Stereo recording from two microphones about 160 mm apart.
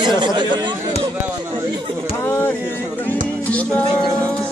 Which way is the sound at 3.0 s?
10° left (ahead or behind).